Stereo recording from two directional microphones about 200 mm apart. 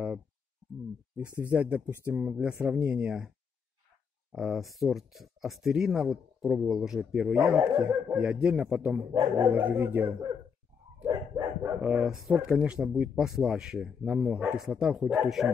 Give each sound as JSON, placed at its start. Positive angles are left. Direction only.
{"t": 1.1, "sound": "speech", "side_deg": -10}
{"t": 9.1, "sound": "speech", "side_deg": -25}
{"t": 9.5, "sound": "speech", "side_deg": -10}
{"t": 11.1, "sound": "dog", "side_deg": -20}
{"t": 11.8, "sound": "speech", "side_deg": -5}